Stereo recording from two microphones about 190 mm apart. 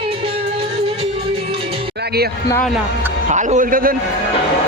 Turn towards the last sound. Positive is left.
turn(degrees=-45)  # may be behind; listen again after turning